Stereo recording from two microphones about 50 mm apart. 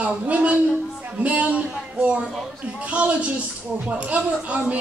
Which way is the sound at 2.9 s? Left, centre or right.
Right.